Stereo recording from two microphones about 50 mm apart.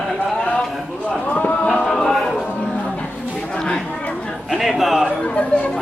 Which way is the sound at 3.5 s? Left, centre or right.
Centre.